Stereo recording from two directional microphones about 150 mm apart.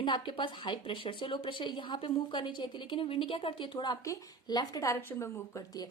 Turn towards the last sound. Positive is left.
turn(degrees=20)  # may be behind; listen again after turning